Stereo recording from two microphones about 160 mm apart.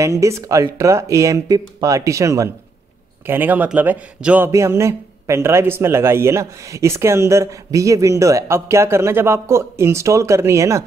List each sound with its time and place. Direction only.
0.0 s speech: 20° right (ahead or behind)